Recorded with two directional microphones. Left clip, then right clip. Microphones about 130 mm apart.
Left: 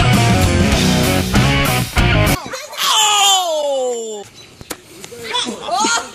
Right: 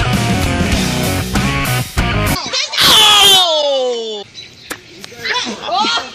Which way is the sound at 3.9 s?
40° right (ahead or behind).